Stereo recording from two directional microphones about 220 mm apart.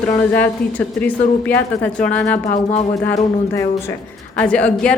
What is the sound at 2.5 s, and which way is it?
Speech, 30° left (ahead or behind).